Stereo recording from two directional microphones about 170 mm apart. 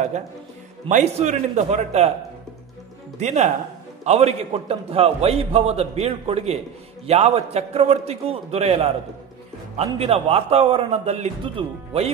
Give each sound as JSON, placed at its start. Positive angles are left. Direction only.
{"t": 0.8, "sound": "a man's voice", "side_deg": -45}
{"t": 3.2, "sound": "a man's voice", "side_deg": -40}
{"t": 9.9, "sound": "a man's voice", "side_deg": -35}